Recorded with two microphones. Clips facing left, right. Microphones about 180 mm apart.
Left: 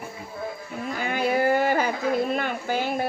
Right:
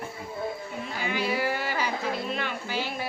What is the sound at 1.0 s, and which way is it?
A woman's voice, 50° left (ahead or behind).